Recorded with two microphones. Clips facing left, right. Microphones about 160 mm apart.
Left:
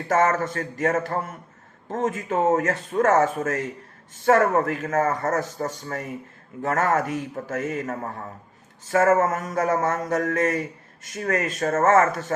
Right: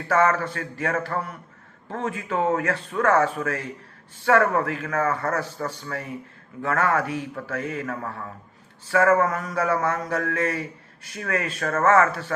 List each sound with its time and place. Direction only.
0.1 s speech: 40° left (ahead or behind)